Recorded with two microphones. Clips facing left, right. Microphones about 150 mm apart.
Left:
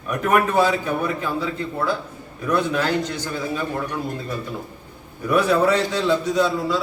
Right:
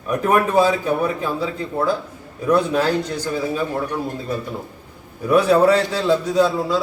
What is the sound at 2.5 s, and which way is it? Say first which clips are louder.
Speech: right 4 dB; 40° right (ahead or behind).